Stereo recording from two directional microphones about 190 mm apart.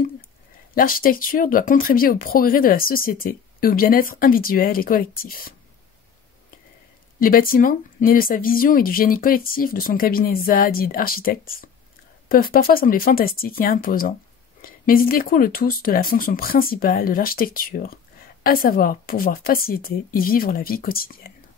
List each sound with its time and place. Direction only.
0.7 s speech: 50° left (ahead or behind)
7.2 s speech: 50° left (ahead or behind)